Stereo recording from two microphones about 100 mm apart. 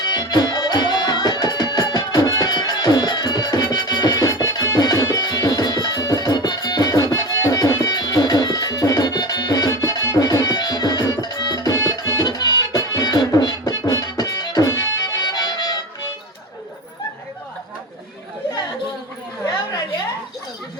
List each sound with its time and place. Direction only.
0.0 s music: 40° left (ahead or behind)